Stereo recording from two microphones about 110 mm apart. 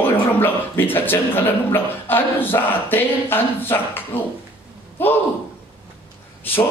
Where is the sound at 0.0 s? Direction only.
20° left (ahead or behind).